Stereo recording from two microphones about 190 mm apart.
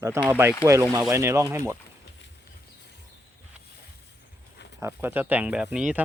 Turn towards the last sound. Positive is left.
turn(degrees=-5)  # may be behind; listen again after turning